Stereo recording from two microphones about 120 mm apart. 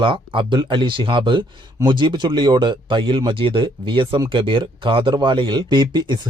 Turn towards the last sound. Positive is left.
turn(degrees=-35)  # may be behind; listen again after turning